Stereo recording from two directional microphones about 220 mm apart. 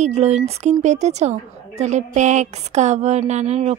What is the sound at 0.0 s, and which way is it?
A woman's voice, 30° right (ahead or behind).